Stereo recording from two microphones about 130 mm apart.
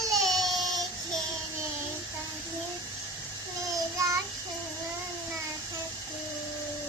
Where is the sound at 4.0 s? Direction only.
25° right (ahead or behind).